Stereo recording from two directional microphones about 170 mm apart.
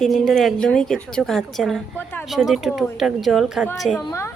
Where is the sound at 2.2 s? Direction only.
Centre (ahead or behind).